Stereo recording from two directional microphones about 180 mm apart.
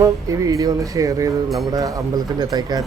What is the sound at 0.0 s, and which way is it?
Speech, 20° right (ahead or behind).